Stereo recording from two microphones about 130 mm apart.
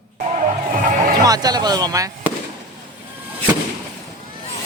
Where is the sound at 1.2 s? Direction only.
30° right (ahead or behind).